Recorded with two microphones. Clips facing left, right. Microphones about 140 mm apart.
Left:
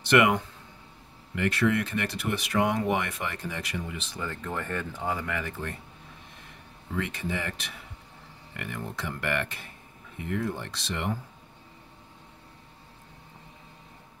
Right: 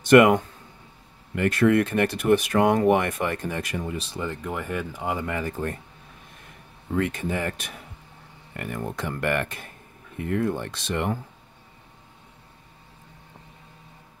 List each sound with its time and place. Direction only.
0.0 s speech: 45° right (ahead or behind)
4.2 s speech: 15° right (ahead or behind)
5.3 s speech: 40° right (ahead or behind)
7.0 s speech: 50° right (ahead or behind)